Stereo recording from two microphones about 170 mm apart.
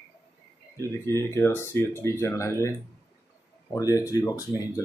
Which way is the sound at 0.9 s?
15° left (ahead or behind).